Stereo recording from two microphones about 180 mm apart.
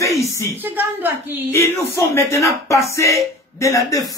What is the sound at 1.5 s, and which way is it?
Speech, 15° left (ahead or behind).